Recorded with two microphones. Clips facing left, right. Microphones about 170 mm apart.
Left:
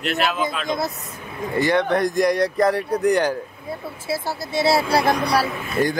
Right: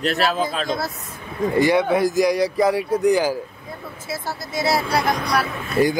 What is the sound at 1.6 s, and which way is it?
Speech, 10° right (ahead or behind).